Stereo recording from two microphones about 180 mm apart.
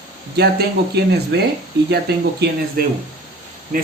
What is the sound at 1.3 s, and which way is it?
Speech, 70° right (ahead or behind).